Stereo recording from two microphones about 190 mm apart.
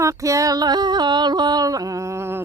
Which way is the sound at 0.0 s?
15° right (ahead or behind).